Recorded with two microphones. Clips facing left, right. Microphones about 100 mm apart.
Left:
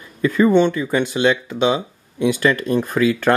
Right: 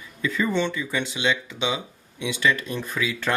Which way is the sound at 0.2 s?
50° left (ahead or behind).